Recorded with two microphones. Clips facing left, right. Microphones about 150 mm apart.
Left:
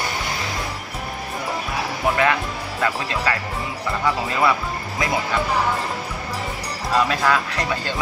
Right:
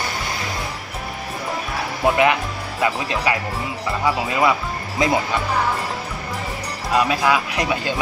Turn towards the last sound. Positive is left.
turn(degrees=-15)  # may be behind; listen again after turning